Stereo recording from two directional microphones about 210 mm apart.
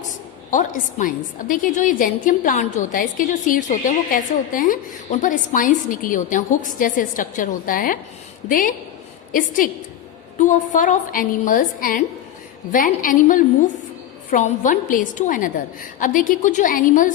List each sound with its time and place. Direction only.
0.5 s a woman's voice: 40° left (ahead or behind)